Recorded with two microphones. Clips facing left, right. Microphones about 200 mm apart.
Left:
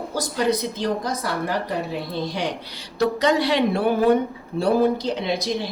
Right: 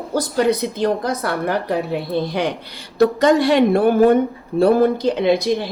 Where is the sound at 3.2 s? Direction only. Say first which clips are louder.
Right 5 dB; 50° right (ahead or behind).